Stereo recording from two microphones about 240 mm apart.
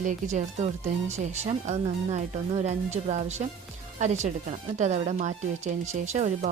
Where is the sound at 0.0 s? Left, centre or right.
Right.